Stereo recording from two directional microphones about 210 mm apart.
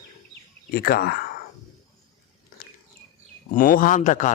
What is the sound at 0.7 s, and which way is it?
Speech, 45° left (ahead or behind).